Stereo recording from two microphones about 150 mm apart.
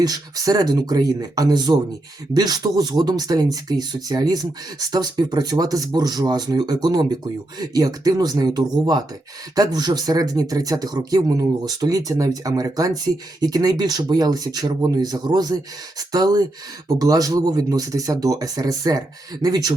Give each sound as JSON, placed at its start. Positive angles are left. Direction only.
{"t": 0.0, "sound": "speech", "side_deg": -25}